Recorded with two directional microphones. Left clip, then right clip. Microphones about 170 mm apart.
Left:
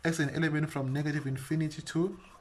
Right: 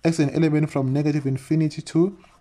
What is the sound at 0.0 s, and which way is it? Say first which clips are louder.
Speech: right 10 dB; 35° right (ahead or behind).